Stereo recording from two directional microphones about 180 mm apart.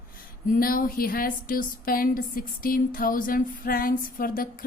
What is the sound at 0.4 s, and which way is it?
Speech, 50° left (ahead or behind).